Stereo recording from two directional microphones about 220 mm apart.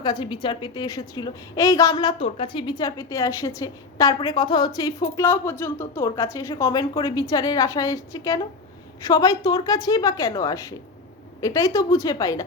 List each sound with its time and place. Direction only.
0.0 s a woman's voice: 20° left (ahead or behind)